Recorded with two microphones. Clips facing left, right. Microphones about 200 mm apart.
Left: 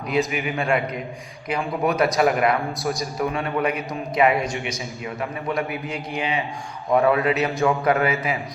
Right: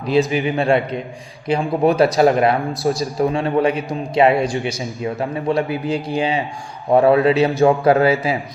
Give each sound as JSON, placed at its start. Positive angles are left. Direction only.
{"t": 0.3, "sound": "a man's voice", "side_deg": -30}